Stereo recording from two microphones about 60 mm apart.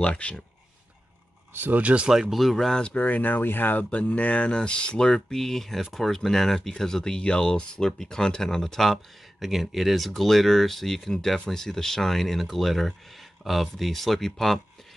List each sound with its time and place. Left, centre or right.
0.0 s speech: centre
1.5 s speech: right
1.8 s speech: right
2.0 s speech: centre
2.8 s speech: left
3.9 s speech: left; by 14.6 s centre